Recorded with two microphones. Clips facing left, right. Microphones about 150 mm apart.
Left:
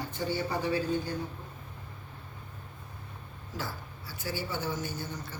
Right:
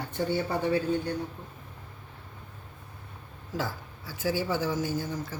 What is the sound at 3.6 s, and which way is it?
A woman's voice, 90° right.